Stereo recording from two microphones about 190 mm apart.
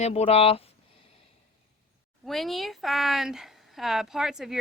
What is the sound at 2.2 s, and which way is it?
Speech, centre (ahead or behind).